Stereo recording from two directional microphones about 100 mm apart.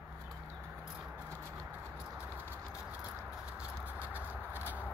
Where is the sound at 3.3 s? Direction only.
10° right (ahead or behind).